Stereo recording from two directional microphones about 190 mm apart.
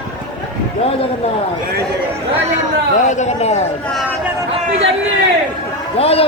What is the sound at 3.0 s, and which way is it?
Speech, 40° left (ahead or behind).